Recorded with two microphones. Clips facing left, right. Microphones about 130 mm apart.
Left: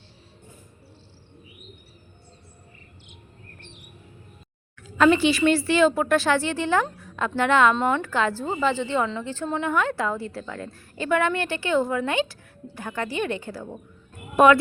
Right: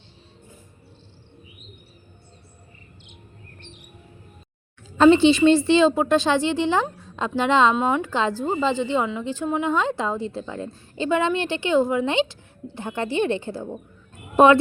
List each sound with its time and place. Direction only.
4.9 s a woman's voice: 25° right (ahead or behind)